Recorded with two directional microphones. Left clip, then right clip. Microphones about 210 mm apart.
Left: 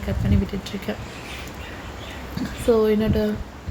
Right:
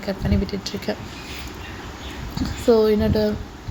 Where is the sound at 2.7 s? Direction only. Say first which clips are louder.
Right 2 dB; 15° right (ahead or behind).